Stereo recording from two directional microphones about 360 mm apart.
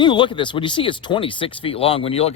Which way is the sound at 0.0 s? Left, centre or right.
Centre.